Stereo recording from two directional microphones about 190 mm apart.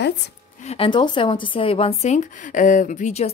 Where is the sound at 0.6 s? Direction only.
30° left (ahead or behind).